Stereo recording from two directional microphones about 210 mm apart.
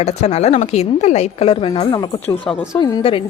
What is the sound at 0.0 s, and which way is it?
A woman's voice, 30° left (ahead or behind).